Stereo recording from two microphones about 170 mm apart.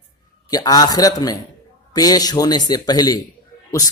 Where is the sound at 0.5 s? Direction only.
20° left (ahead or behind).